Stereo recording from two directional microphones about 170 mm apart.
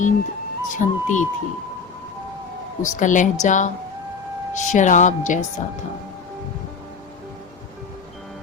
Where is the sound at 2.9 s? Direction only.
45° left (ahead or behind).